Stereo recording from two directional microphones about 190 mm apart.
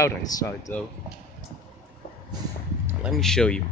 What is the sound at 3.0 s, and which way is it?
Speech, centre (ahead or behind).